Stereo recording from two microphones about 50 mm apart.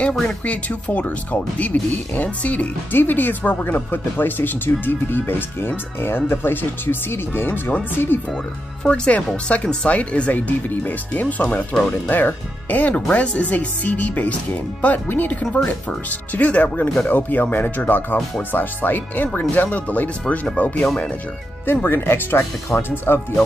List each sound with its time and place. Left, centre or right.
0.5 s speech: left
2.9 s speech: left
8.8 s speech: left
10.7 s speech: left
11.7 s speech: centre
12.1 s speech: left
21.8 s speech: left